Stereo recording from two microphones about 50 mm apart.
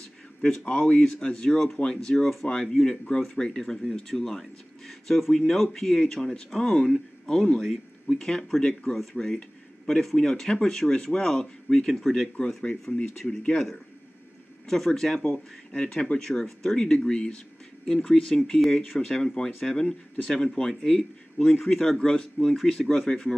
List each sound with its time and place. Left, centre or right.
0.7 s speech: left; by 8.2 s centre
8.2 s speech: centre
14.9 s speech: centre
16.3 s speech: centre